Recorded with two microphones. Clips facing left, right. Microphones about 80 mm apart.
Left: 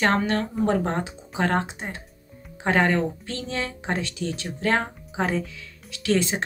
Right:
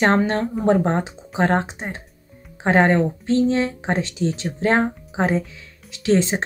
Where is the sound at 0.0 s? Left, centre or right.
Right.